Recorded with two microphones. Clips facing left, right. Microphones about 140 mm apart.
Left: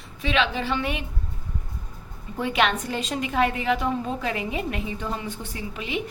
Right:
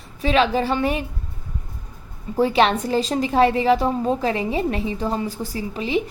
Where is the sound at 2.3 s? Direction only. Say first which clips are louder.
Right 6 dB; 35° right (ahead or behind).